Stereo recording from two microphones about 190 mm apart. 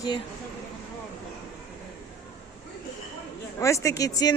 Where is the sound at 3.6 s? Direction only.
15° left (ahead or behind).